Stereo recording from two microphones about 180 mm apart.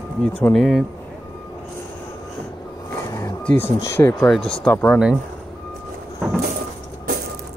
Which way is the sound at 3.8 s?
15° left (ahead or behind).